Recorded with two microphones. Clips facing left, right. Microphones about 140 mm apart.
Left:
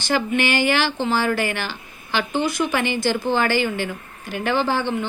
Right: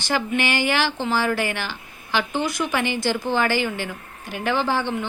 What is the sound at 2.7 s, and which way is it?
Speech, 10° right (ahead or behind).